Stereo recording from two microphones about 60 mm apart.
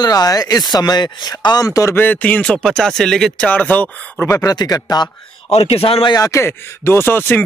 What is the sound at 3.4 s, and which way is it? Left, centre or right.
Speech, left.